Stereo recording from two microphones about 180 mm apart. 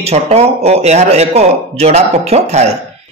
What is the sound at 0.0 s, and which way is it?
Speech, 35° right (ahead or behind).